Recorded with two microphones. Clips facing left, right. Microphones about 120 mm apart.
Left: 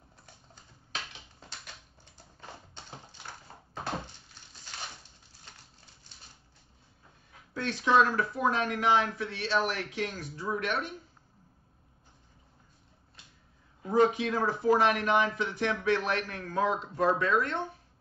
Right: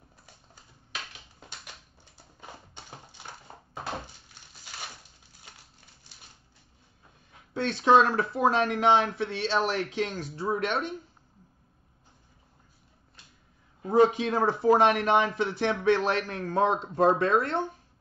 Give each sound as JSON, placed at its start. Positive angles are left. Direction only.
{"t": 2.4, "sound": "tap", "side_deg": -10}
{"t": 7.5, "sound": "speech", "side_deg": -25}
{"t": 14.0, "sound": "speech", "side_deg": -30}